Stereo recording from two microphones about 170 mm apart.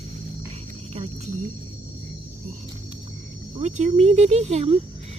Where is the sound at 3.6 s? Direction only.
40° right (ahead or behind).